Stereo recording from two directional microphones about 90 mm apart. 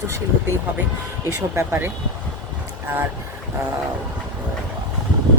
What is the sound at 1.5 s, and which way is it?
Speech, 30° right (ahead or behind).